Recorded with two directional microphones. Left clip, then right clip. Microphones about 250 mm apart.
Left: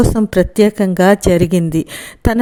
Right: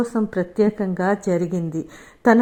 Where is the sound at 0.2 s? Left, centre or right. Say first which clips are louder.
Left 5 dB; left.